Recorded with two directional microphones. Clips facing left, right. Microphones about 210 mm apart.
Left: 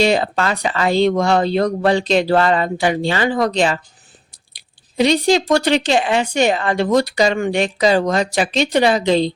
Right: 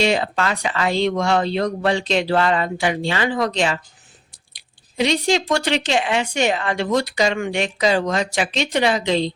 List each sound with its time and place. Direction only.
0.0 s speech: 40° left (ahead or behind)
4.9 s speech: 35° left (ahead or behind)